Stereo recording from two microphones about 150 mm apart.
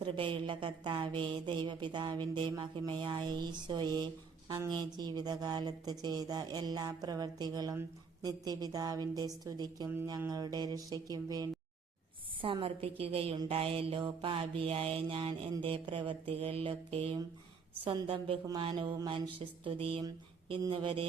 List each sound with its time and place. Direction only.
0.0 s speech: 35° right (ahead or behind)
12.4 s speech: 35° right (ahead or behind)